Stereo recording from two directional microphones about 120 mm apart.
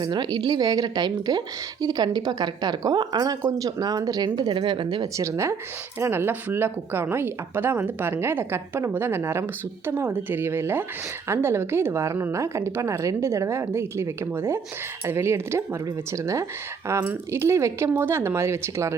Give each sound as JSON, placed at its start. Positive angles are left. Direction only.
{"t": 0.0, "sound": "a woman's voice", "side_deg": -35}
{"t": 5.1, "sound": "speech", "side_deg": -25}